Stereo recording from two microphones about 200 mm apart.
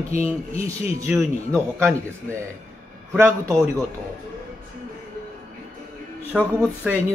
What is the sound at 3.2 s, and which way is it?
Speech, 15° right (ahead or behind).